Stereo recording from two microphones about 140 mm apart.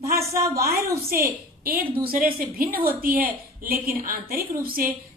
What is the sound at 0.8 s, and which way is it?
A woman's voice, 90° right.